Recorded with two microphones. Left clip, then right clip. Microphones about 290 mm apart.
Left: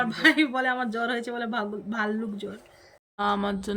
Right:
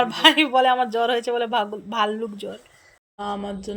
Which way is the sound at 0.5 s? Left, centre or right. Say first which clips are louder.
Right 8 dB; centre.